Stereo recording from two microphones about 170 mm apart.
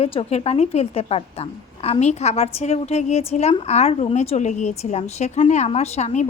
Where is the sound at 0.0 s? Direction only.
35° left (ahead or behind).